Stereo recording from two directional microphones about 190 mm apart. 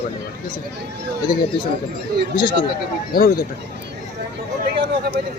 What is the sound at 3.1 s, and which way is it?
Speech, 50° left (ahead or behind).